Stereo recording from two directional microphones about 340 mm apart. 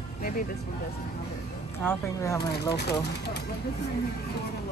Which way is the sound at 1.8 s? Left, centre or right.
Centre.